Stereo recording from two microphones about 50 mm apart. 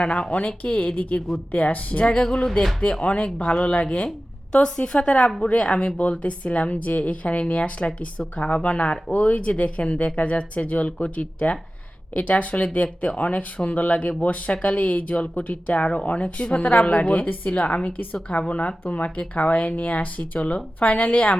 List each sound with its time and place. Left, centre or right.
0.0 s a woman's voice: left